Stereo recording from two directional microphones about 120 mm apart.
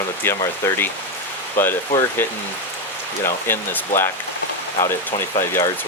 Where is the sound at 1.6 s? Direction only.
20° left (ahead or behind).